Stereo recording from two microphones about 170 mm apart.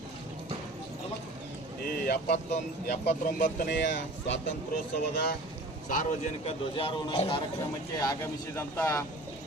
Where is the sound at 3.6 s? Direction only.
85° left.